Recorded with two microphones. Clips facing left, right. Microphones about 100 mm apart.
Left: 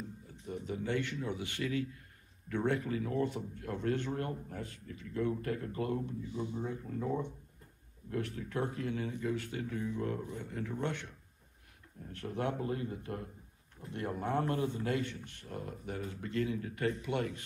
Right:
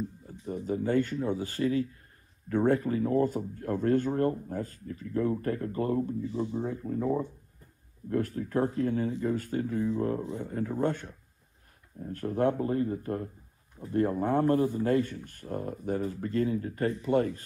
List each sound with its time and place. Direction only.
0.3 s speech: 40° right (ahead or behind)
9.8 s speech: 25° right (ahead or behind)
10.4 s speech: 35° right (ahead or behind)